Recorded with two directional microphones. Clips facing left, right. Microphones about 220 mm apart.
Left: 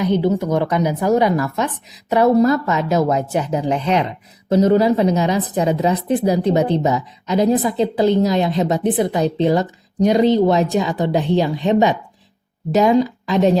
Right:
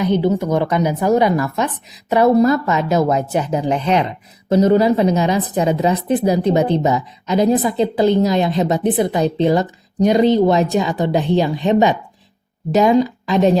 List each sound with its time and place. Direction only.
0.0 s a woman's voice: 20° right (ahead or behind)